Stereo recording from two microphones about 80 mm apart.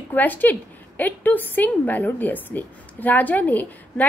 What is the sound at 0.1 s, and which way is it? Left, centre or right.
A woman's voice, left.